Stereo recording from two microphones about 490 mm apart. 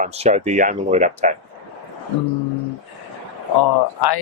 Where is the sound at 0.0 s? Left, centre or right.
Centre.